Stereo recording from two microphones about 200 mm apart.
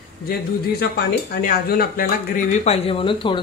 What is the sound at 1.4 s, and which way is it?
Speech, 50° left (ahead or behind).